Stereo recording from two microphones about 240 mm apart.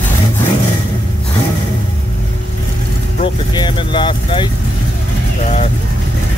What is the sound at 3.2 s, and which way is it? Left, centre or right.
Vehicle, centre.